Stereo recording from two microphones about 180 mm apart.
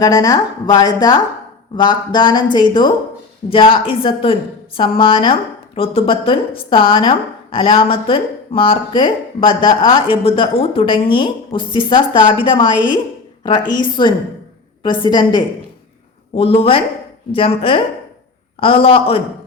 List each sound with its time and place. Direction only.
0.0 s a woman's voice: 20° left (ahead or behind)